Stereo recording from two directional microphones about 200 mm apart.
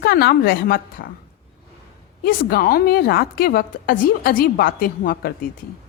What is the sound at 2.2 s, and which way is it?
A woman's voice, 50° left (ahead or behind).